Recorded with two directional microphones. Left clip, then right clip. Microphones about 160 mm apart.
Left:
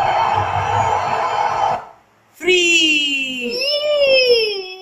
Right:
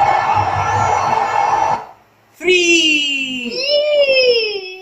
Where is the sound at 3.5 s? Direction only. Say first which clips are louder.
Right 4 dB; 65° left (ahead or behind).